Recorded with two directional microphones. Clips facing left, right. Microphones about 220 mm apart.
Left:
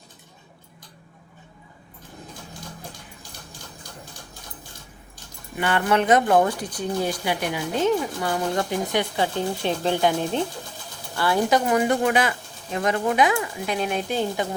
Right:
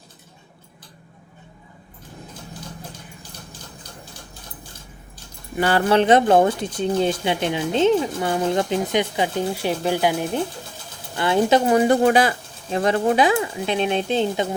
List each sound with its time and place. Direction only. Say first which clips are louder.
5.5 s speech: right 4 dB; 35° right (ahead or behind); by 10.4 s 10° right (ahead or behind)
11.1 s speech: right 3 dB; 20° right (ahead or behind)